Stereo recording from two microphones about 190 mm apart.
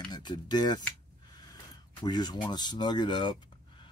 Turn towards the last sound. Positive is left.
turn(degrees=25)  # may be behind; listen again after turning